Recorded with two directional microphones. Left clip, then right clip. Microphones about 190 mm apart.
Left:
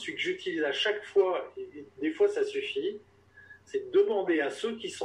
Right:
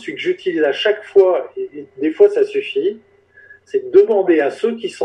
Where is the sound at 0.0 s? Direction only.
45° right (ahead or behind).